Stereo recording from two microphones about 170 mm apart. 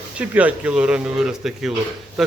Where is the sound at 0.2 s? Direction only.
10° right (ahead or behind).